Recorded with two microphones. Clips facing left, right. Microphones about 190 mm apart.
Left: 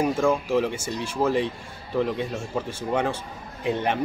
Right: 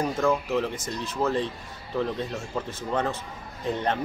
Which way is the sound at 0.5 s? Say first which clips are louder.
Left 3 dB; 10° left (ahead or behind).